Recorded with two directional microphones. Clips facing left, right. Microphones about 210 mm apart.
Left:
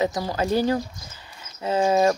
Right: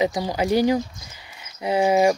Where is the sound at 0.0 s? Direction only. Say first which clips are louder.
Right 2 dB; 15° right (ahead or behind).